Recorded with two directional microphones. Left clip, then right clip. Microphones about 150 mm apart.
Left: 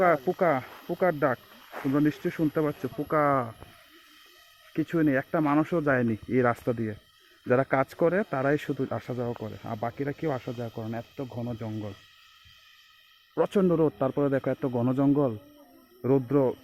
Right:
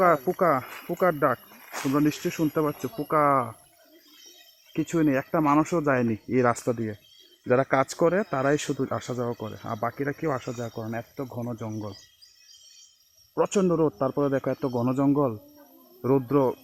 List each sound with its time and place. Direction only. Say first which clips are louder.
0.0 s speech: right 2 dB; 20° right (ahead or behind)
4.7 s speech: right 1 dB; 25° right (ahead or behind)
13.3 s speech: right 1 dB; 5° right (ahead or behind)